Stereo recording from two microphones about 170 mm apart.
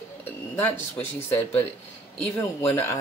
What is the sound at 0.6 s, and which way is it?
Speech, 10° left (ahead or behind).